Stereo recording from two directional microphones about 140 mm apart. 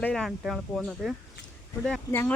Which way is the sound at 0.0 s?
5° left (ahead or behind).